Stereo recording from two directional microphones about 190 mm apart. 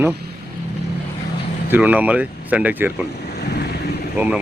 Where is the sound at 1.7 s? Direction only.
10° right (ahead or behind).